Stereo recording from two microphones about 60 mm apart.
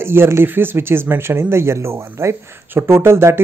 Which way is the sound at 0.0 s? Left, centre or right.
Right.